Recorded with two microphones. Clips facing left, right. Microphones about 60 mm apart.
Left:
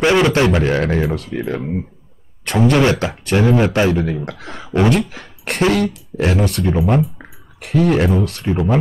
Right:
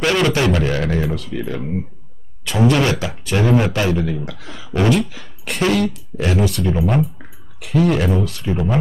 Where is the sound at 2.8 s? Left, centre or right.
Left.